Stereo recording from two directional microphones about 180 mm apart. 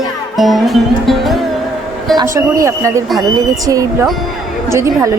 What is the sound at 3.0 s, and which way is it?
Speech, centre (ahead or behind).